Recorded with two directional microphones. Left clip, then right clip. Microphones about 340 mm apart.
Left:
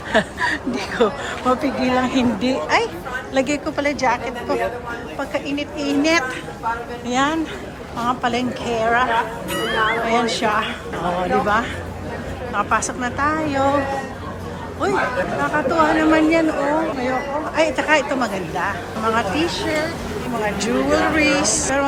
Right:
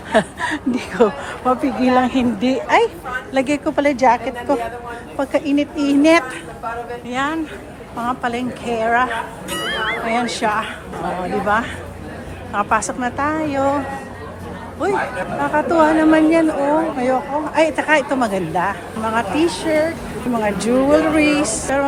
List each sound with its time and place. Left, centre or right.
0.1 s speech: centre
7.1 s speech: centre
14.8 s speech: centre